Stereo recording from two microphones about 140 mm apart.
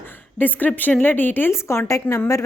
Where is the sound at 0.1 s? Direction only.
15° left (ahead or behind).